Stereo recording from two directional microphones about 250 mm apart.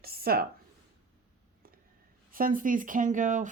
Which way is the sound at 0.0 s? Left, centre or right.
Right.